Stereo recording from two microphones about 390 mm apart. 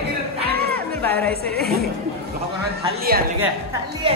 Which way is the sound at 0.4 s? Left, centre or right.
Right.